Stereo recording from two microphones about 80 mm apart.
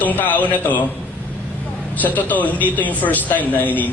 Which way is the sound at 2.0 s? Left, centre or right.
Left.